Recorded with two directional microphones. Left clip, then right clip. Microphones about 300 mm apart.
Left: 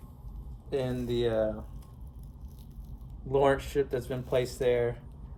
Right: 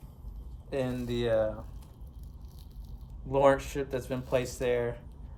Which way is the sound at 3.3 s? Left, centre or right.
Centre.